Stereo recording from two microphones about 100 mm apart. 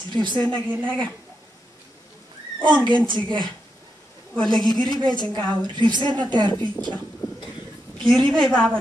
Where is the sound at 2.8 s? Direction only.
55° right (ahead or behind).